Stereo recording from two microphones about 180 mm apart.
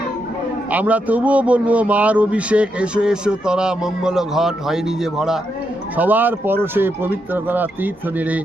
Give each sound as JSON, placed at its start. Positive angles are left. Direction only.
{"t": 0.7, "sound": "a man's voice", "side_deg": -10}